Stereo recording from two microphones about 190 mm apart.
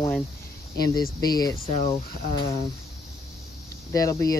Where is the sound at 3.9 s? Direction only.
20° left (ahead or behind).